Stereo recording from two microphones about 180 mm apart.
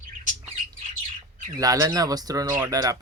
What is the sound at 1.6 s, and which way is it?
Speech, 20° right (ahead or behind).